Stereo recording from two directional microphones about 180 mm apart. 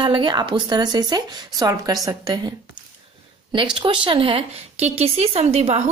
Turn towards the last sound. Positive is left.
turn(degrees=-35)  # may be behind; listen again after turning